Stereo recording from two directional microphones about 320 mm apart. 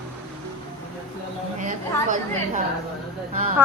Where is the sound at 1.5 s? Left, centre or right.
Right.